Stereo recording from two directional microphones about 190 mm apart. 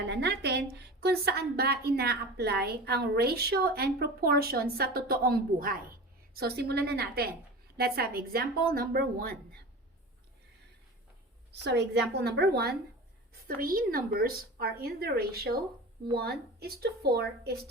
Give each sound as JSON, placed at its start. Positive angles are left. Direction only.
{"t": 0.1, "sound": "a woman's voice", "side_deg": -60}
{"t": 11.6, "sound": "a woman's voice", "side_deg": -65}